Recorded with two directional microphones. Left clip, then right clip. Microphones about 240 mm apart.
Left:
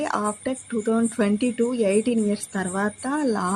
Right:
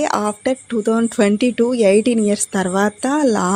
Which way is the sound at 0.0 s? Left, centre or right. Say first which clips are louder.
Right 7 dB; right.